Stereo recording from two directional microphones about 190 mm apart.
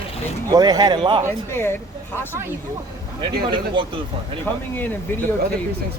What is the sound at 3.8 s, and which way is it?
Speech, 25° right (ahead or behind).